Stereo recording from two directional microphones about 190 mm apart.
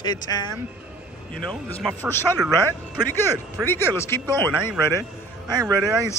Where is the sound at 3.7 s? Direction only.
15° left (ahead or behind).